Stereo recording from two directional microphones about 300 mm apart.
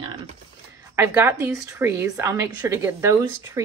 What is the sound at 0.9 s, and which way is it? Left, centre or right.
A woman's voice, centre.